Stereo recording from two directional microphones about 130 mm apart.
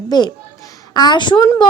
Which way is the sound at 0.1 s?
30° left (ahead or behind).